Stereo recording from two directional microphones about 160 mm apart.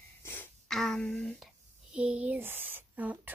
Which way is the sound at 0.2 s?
15° left (ahead or behind).